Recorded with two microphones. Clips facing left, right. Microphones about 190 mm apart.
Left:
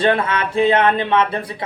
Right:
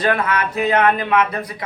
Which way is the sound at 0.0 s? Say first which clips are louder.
Left 2 dB; 25° left (ahead or behind).